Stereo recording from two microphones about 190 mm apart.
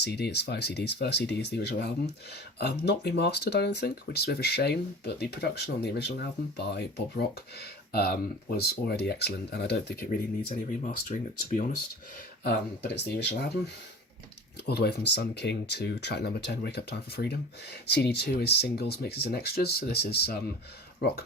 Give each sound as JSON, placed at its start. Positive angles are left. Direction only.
{"t": 0.0, "sound": "speech", "side_deg": 60}
{"t": 12.4, "sound": "speech", "side_deg": 60}
{"t": 14.7, "sound": "speech", "side_deg": 60}